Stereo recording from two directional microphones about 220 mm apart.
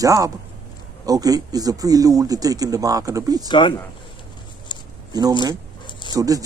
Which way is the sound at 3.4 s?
20° left (ahead or behind).